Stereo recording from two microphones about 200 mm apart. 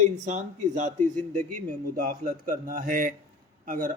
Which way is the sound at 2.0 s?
45° right (ahead or behind).